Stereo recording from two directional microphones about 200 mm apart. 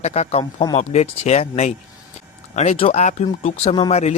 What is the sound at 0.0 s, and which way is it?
A man's voice, 35° left (ahead or behind).